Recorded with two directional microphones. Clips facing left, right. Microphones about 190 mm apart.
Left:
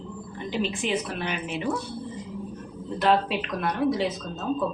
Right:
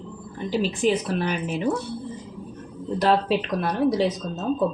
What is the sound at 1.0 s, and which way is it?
Speech, 40° right (ahead or behind).